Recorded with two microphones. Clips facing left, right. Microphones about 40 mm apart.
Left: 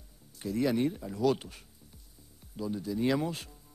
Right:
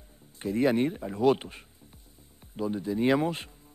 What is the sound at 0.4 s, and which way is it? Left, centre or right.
Speech, right.